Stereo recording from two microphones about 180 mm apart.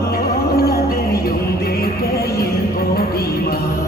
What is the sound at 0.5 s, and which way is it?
Music, 55° left (ahead or behind).